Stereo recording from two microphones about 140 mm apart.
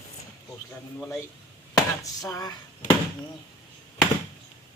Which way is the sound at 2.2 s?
25° left (ahead or behind).